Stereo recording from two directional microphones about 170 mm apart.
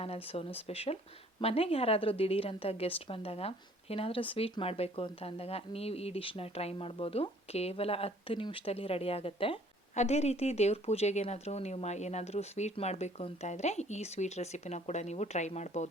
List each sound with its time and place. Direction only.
0.0 s a woman's voice: 35° left (ahead or behind)